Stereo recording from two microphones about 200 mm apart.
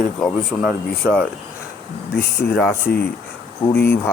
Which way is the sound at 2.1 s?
50° left (ahead or behind).